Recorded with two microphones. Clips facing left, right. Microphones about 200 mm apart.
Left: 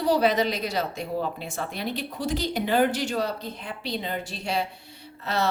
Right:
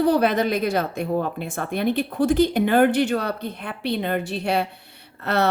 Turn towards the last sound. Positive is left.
turn(degrees=-60)  # may be behind; listen again after turning